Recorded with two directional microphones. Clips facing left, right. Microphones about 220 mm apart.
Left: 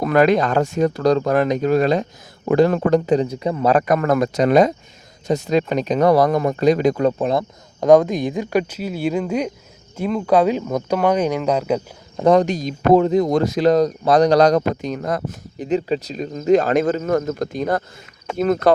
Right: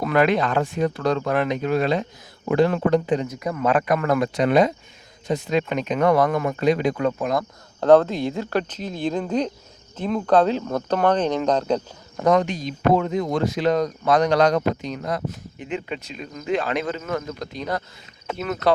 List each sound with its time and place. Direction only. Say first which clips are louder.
0.0 s speech: left 4 dB; 40° left (ahead or behind)
7.8 s speech: left 2 dB; 15° left (ahead or behind)
12.2 s speech: left 4 dB; 35° left (ahead or behind)
16.5 s speech: left 9 dB; 45° left (ahead or behind)